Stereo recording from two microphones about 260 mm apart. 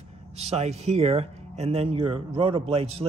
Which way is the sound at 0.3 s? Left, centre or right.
Right.